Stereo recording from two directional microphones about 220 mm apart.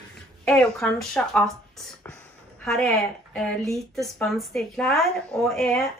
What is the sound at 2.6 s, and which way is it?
A woman's voice, centre (ahead or behind).